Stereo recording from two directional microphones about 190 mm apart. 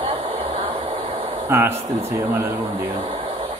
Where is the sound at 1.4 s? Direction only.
10° right (ahead or behind).